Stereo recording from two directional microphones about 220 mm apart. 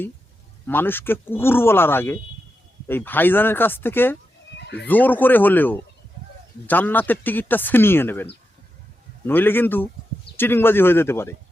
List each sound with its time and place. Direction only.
0.7 s speech: 10° left (ahead or behind)
4.5 s a sound: 50° left (ahead or behind)
4.9 s speech: 10° left (ahead or behind)